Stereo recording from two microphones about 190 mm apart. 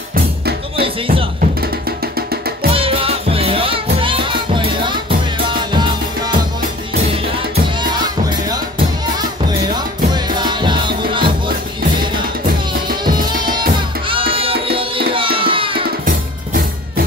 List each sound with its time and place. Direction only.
0.1 s music: 55° right (ahead or behind)
0.8 s music: 30° right (ahead or behind)
1.6 s music: 55° right (ahead or behind)
2.7 s music: 30° right (ahead or behind)
7.8 s music: 20° right (ahead or behind)
16.1 s music: 50° right (ahead or behind)